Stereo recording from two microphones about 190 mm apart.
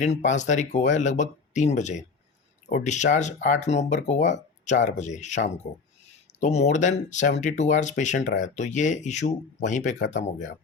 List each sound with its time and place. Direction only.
0.0 s speech: 40° left (ahead or behind)